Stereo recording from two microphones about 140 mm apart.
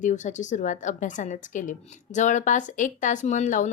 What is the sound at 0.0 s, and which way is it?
Speech, 60° left (ahead or behind).